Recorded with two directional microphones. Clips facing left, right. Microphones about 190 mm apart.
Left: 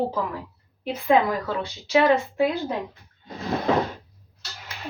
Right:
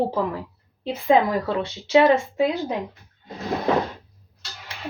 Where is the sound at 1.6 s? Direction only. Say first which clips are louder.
Right 3 dB; 25° right (ahead or behind).